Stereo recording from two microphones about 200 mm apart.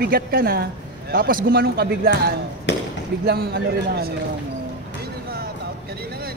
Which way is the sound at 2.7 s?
65° left (ahead or behind).